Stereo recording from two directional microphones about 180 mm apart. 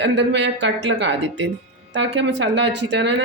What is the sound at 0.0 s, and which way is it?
Speech, 75° right (ahead or behind).